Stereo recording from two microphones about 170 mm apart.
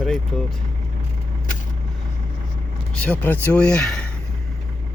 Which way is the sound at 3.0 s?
10° left (ahead or behind).